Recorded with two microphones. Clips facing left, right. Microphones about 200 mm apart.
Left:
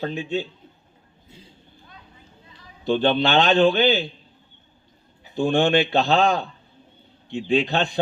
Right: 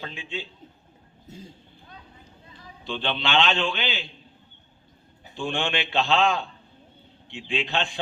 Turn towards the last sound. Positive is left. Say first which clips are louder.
# left 7 dB
turn(degrees=40)  # may be behind; listen again after turning